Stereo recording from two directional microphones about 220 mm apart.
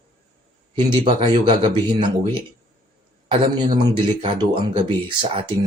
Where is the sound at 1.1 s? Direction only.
20° right (ahead or behind).